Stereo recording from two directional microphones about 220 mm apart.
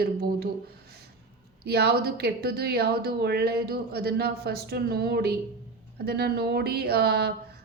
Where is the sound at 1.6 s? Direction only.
45° right (ahead or behind).